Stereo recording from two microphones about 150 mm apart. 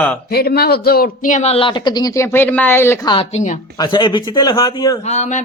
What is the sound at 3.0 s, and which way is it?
Speech, 35° left (ahead or behind).